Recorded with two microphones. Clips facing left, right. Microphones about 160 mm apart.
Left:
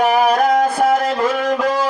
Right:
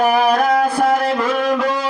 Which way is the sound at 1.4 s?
45° left (ahead or behind).